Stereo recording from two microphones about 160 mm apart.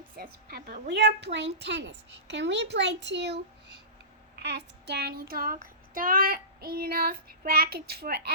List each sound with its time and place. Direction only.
0.2 s a woman's voice: 75° right (ahead or behind); by 3.4 s 90° right
4.4 s child singing: 90° right